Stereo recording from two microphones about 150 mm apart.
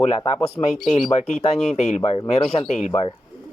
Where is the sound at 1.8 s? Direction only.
50° left (ahead or behind).